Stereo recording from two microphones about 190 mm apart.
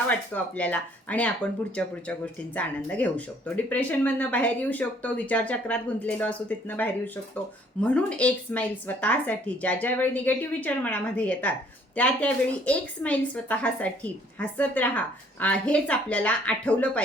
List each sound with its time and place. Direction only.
0.1 s speech: 10° left (ahead or behind)